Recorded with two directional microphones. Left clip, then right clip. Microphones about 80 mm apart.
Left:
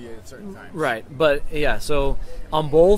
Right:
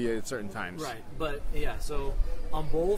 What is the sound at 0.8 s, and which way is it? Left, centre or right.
Speech, left.